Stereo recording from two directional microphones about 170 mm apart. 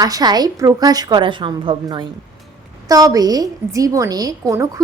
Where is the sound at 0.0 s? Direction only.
25° right (ahead or behind).